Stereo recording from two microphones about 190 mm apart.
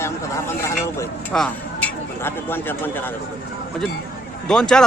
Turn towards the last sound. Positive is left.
turn(degrees=5)  # may be behind; listen again after turning